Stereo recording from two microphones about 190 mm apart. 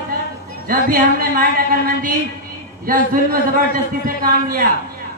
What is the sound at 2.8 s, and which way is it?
Speech, 45° right (ahead or behind).